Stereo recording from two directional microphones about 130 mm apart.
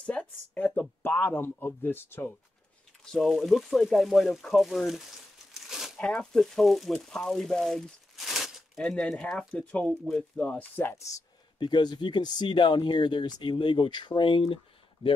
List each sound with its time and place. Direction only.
0.0 s speech: 10° left (ahead or behind)
3.1 s speech: centre (ahead or behind)
5.7 s a sound: 5° right (ahead or behind)
5.9 s speech: 5° left (ahead or behind); by 15.2 s 45° left (ahead or behind)